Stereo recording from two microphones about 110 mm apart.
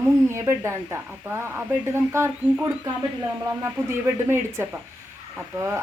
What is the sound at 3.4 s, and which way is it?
Speech, 25° right (ahead or behind).